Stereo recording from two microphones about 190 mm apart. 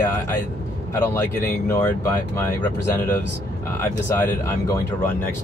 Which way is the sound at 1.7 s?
15° left (ahead or behind).